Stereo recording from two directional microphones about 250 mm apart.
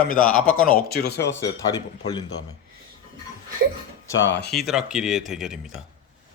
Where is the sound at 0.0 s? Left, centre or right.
Left.